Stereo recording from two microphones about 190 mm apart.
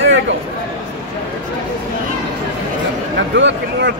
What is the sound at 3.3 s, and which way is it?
Speech, 70° right (ahead or behind).